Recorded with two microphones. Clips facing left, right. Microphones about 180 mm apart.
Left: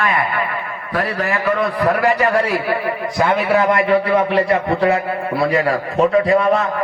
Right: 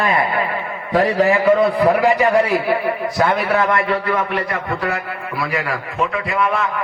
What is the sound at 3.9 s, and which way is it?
A man's voice, 30° left (ahead or behind).